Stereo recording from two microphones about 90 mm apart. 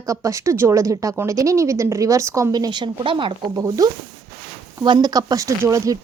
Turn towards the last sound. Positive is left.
turn(degrees=-35)  # may be behind; listen again after turning